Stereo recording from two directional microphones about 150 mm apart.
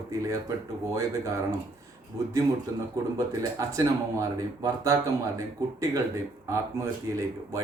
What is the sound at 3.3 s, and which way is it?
Speech, 20° right (ahead or behind).